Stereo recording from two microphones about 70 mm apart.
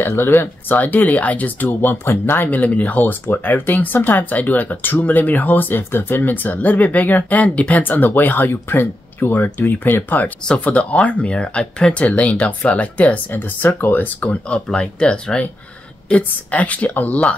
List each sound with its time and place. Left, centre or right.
0.0 s speech: left; by 17.4 s centre